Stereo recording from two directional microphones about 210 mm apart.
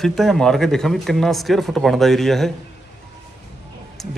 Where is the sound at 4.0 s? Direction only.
Centre (ahead or behind).